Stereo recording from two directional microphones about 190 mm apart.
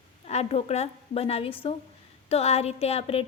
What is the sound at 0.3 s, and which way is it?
A woman's voice, 35° left (ahead or behind).